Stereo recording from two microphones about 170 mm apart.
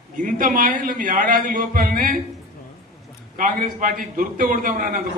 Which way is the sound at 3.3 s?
55° right (ahead or behind).